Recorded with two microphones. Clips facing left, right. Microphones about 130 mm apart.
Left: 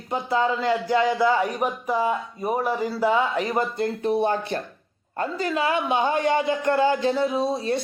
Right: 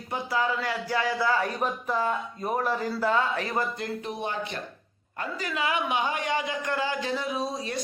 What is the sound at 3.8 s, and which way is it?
A man's voice, 35° left (ahead or behind).